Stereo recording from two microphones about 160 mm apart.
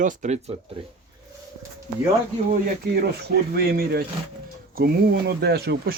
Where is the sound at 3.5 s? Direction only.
75° right (ahead or behind).